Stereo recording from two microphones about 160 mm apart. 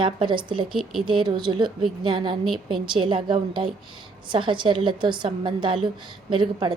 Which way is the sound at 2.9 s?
30° right (ahead or behind).